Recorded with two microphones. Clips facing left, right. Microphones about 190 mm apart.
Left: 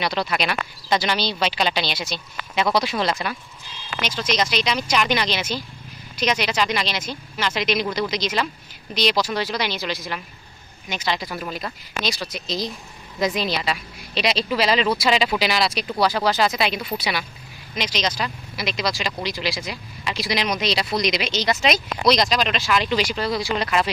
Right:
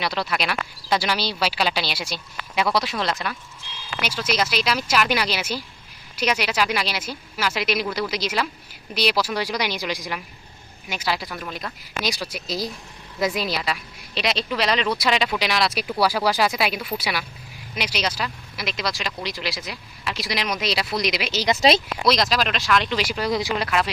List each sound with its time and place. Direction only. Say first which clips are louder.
0.0 s a woman's voice: left 2 dB; centre (ahead or behind)
12.0 s a woman's voice: even; 10° right (ahead or behind)
23.6 s a woman's voice: left 1 dB; centre (ahead or behind)